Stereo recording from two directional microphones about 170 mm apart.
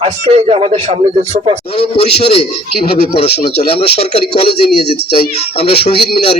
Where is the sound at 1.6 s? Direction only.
35° left (ahead or behind).